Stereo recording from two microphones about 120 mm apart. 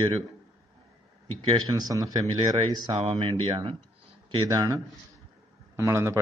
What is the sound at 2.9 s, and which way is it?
Speech, 50° right (ahead or behind).